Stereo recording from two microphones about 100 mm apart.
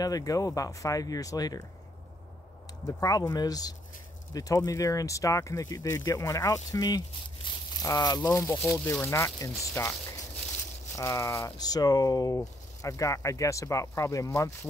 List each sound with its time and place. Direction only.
0.0 s speech: 35° left (ahead or behind)
2.9 s speech: 35° left (ahead or behind)
7.5 s a sound: 55° left (ahead or behind)
7.8 s speech: 40° left (ahead or behind)
8.3 s speech: 25° left (ahead or behind)
11.0 s speech: 30° left (ahead or behind)
11.5 s speech: 40° left (ahead or behind)